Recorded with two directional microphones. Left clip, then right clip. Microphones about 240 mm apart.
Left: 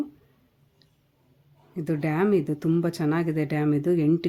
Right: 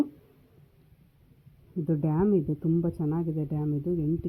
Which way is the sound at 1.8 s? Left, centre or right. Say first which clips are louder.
Left 3 dB; centre.